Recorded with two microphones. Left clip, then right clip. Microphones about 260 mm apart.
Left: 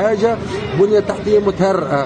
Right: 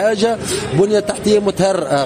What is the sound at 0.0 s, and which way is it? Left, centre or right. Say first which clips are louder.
A man's voice: even; right.